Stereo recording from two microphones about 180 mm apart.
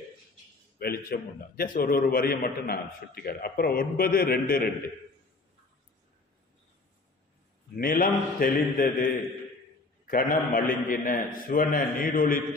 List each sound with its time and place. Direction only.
0.7 s a man's voice: 55° left (ahead or behind)
7.7 s a man's voice: 50° left (ahead or behind)